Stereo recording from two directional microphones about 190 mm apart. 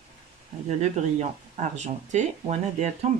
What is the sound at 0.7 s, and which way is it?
Speech, 35° right (ahead or behind).